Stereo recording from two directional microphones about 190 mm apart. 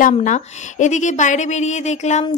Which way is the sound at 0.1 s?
40° left (ahead or behind).